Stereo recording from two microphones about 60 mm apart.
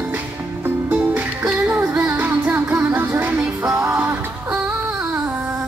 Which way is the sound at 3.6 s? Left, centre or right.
Right.